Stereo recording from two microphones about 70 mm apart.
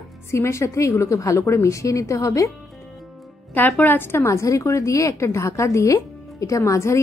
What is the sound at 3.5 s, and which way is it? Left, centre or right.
A woman's voice, left.